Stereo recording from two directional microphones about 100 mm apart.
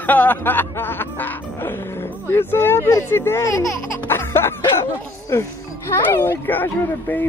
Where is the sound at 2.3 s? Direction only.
20° left (ahead or behind).